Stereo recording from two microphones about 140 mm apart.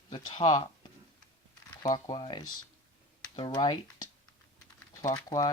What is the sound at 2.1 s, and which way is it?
Speech, 35° left (ahead or behind).